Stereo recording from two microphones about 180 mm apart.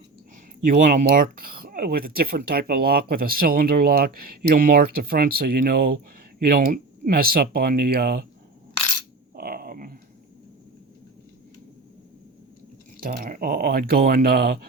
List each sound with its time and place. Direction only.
0.7 s speech: 50° right (ahead or behind)
9.3 s a sound: 55° right (ahead or behind)
13.0 s speech: 50° right (ahead or behind)